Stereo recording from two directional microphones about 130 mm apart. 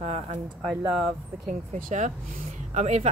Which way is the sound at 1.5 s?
85° right.